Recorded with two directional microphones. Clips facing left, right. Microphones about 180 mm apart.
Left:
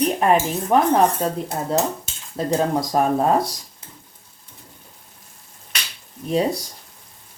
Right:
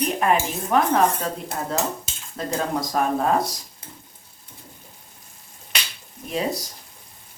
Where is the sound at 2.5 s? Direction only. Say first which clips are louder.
Left 5 dB; 30° left (ahead or behind).